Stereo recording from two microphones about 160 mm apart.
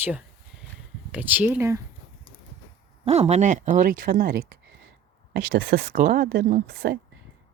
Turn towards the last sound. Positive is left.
turn(degrees=-65)  # may be behind; listen again after turning